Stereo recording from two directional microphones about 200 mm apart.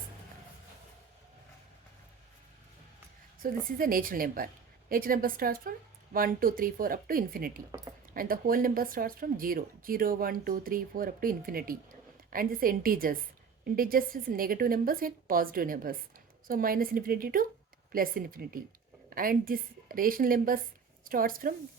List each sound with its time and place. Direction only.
3.4 s a woman's voice: 45° right (ahead or behind)